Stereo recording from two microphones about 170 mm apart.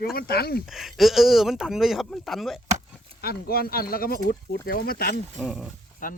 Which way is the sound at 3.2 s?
65° left (ahead or behind).